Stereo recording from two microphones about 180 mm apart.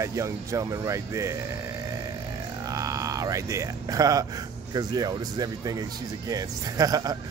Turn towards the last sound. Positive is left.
turn(degrees=-20)  # may be behind; listen again after turning